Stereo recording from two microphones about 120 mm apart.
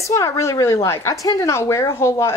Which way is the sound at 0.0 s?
25° left (ahead or behind).